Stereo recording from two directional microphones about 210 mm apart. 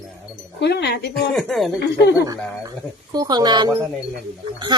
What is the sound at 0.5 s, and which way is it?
Speech, 55° left (ahead or behind).